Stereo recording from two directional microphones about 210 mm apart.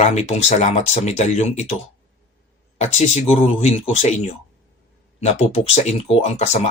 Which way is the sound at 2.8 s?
35° left (ahead or behind).